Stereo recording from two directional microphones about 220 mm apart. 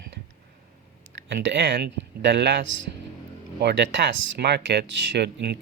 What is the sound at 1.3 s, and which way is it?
Speech, 55° right (ahead or behind).